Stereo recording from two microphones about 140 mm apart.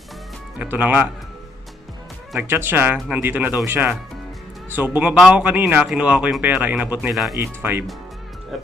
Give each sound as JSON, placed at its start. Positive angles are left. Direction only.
{"t": 0.6, "sound": "speech", "side_deg": -10}
{"t": 2.3, "sound": "speech", "side_deg": -15}